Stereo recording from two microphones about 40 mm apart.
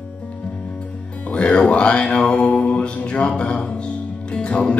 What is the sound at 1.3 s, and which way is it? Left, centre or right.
Music, left.